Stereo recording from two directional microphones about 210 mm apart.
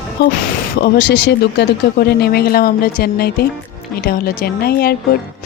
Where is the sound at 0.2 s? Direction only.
50° left (ahead or behind).